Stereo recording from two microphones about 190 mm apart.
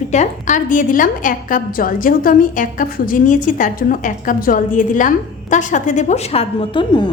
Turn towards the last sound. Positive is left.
turn(degrees=25)  # may be behind; listen again after turning